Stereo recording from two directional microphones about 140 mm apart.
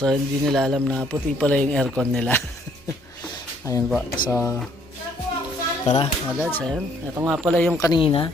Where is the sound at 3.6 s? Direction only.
20° left (ahead or behind).